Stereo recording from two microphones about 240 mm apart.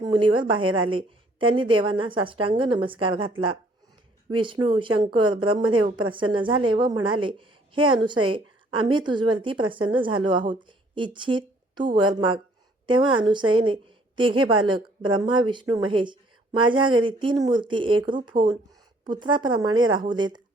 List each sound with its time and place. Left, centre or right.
0.0 s a woman's voice: centre